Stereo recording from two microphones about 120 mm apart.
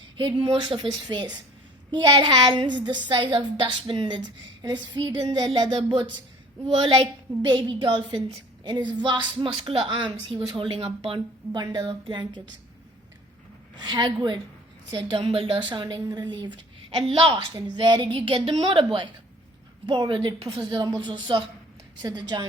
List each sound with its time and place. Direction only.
0.2 s a woman's voice: 45° right (ahead or behind)
10.7 s a woman's voice: 55° right (ahead or behind)
11.5 s a woman's voice: 35° right (ahead or behind)
13.7 s a woman's voice: 40° right (ahead or behind)
17.7 s a woman's voice: 40° right (ahead or behind)
19.9 s a woman's voice: 40° right (ahead or behind)